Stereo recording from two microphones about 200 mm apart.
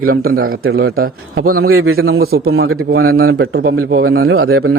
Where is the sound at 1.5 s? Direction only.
90° right.